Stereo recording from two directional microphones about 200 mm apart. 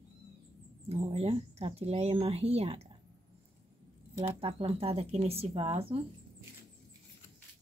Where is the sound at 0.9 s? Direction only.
30° right (ahead or behind).